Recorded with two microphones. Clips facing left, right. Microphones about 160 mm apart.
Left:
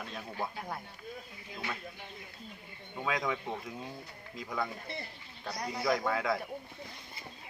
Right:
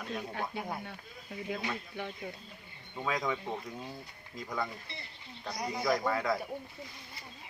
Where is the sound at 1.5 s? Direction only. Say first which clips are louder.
Right 7 dB; 65° right (ahead or behind).